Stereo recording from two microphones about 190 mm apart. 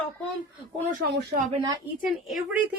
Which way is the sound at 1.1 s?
60° right (ahead or behind).